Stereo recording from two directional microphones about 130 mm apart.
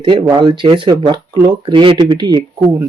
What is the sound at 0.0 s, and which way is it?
Speech, 40° right (ahead or behind).